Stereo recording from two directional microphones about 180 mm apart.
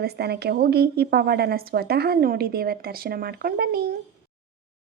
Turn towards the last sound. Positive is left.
turn(degrees=-60)  # may be behind; listen again after turning